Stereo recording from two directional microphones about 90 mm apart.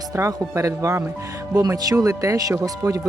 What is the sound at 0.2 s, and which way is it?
Speech, 35° right (ahead or behind).